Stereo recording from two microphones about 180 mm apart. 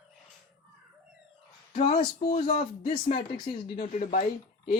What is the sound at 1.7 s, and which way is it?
Speech, 40° left (ahead or behind).